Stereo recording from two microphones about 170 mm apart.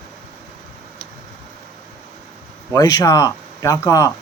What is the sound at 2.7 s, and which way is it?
Speech, 20° left (ahead or behind).